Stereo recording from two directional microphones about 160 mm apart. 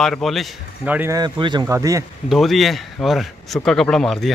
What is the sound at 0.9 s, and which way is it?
A woman's voice, 20° right (ahead or behind).